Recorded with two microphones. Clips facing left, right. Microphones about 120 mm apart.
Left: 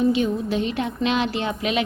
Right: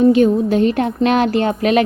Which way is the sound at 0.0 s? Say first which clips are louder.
Right 9 dB; 45° right (ahead or behind).